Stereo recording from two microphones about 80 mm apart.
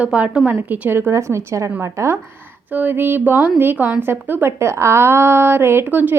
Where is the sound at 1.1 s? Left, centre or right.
Right.